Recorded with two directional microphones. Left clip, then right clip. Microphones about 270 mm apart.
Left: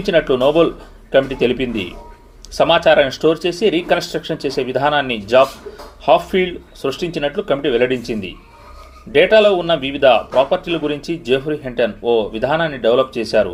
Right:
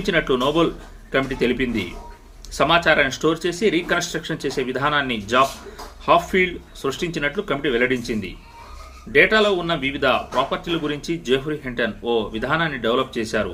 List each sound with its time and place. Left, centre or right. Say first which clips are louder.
0.0 s a man's voice: left 6 dB; centre